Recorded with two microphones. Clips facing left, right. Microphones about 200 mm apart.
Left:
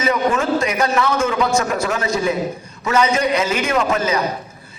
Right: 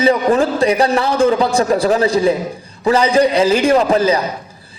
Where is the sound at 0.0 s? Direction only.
35° right (ahead or behind).